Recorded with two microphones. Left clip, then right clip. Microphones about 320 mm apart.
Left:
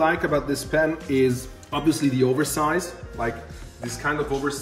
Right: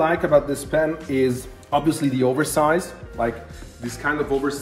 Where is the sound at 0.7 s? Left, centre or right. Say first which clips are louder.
Right 1 dB; centre.